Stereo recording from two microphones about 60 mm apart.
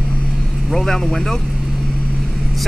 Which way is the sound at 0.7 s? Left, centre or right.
Centre.